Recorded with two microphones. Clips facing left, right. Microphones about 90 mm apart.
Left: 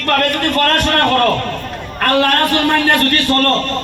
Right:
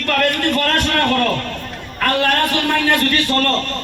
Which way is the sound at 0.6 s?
55° left (ahead or behind).